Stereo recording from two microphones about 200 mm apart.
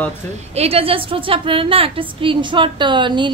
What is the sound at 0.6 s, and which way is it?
A woman's voice, 30° right (ahead or behind).